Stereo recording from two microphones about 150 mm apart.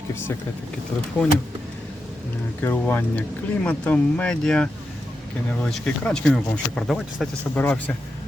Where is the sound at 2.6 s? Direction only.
15° left (ahead or behind).